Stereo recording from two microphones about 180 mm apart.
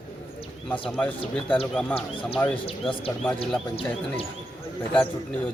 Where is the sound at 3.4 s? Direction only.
30° left (ahead or behind).